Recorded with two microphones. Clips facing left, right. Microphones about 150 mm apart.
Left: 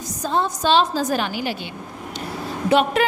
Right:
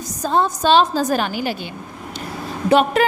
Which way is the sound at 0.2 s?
45° right (ahead or behind).